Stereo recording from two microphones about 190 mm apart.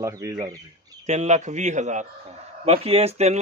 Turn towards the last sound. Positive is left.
turn(degrees=-35)  # may be behind; listen again after turning